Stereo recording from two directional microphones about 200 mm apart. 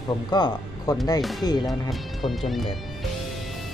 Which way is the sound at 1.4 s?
20° left (ahead or behind).